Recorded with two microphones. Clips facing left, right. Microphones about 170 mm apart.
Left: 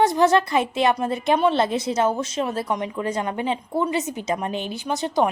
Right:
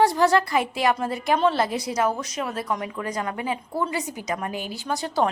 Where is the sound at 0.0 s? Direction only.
20° left (ahead or behind).